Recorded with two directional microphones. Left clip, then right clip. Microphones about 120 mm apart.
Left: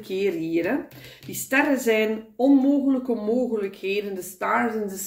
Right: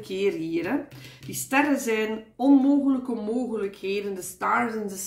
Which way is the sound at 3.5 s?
35° right (ahead or behind).